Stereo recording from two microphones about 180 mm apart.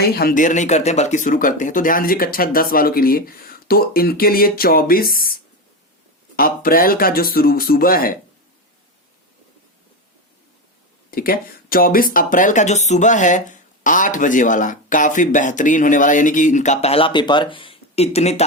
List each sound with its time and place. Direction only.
0.2 s speech: 50° left (ahead or behind)
11.1 s speech: 55° left (ahead or behind); by 18.4 s 35° left (ahead or behind)